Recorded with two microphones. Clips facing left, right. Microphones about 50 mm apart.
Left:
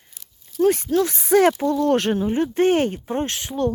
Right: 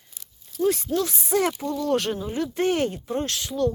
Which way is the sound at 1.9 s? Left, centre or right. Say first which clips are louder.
Left 6 dB; left.